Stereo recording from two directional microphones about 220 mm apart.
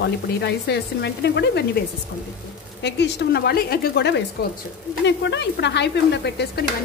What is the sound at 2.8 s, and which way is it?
Stir, 50° left (ahead or behind).